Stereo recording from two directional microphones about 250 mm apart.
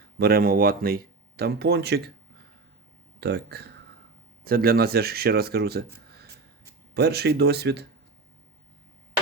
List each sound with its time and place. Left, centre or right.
0.2 s speech: right
3.2 s speech: right